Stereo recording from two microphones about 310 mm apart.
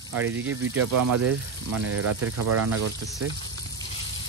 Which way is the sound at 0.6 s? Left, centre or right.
Right.